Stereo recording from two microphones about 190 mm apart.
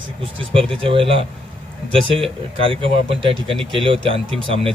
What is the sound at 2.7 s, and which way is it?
Speech, 30° right (ahead or behind).